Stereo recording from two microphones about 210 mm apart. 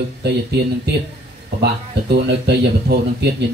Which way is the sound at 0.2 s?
50° right (ahead or behind).